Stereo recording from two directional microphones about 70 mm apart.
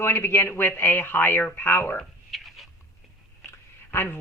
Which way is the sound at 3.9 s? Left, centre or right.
Left.